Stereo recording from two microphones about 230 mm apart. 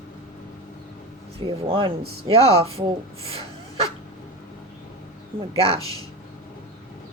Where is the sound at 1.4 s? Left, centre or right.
Right.